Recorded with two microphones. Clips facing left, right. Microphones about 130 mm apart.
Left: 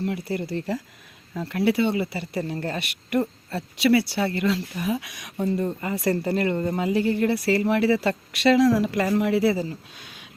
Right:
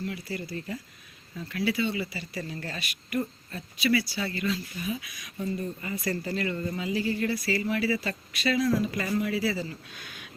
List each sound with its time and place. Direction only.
0.0 s a woman's voice: 55° left (ahead or behind)